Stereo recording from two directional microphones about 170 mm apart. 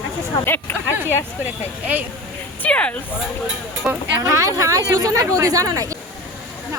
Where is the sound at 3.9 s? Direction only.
5° right (ahead or behind).